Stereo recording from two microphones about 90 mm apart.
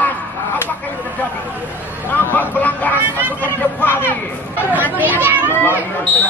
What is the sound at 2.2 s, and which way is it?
Vehicle, 20° left (ahead or behind).